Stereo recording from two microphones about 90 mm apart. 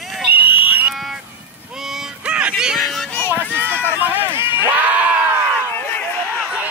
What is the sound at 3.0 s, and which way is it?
Run, 25° left (ahead or behind).